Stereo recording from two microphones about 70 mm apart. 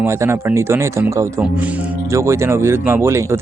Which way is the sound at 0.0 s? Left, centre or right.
Right.